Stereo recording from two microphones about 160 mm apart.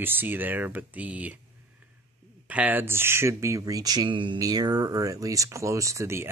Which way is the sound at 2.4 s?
10° right (ahead or behind).